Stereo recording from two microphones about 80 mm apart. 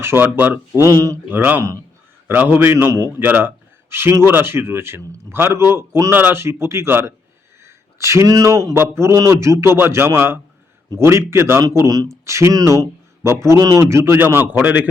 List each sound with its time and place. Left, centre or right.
0.0 s a man's voice: right
0.8 s speech: right
1.3 s a man's voice: right
11.9 s speech: right
12.2 s speech: right
13.6 s speech: right
13.9 s a man's voice: right